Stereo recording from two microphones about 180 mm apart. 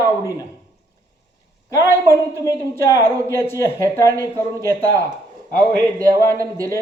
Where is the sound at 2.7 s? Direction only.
15° left (ahead or behind).